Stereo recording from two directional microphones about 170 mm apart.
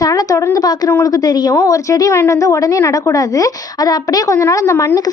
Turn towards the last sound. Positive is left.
turn(degrees=20)  # may be behind; listen again after turning